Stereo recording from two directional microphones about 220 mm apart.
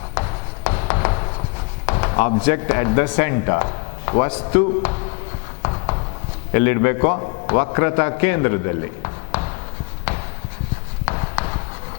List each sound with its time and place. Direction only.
0.1 s writing: 20° left (ahead or behind)
1.9 s a sound: 15° left (ahead or behind)
2.4 s speech: 15° left (ahead or behind)
5.6 s a sound: 20° left (ahead or behind)
6.5 s a man's voice: 15° left (ahead or behind)
11.0 s clip-clop: 20° left (ahead or behind)